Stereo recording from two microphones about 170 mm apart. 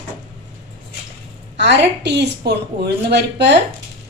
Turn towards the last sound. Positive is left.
turn(degrees=-85)